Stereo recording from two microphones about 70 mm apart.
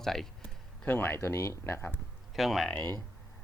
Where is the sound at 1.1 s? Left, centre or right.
Left.